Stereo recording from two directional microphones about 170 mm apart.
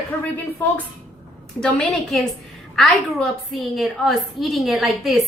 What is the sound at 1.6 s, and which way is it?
Speech, 5° left (ahead or behind).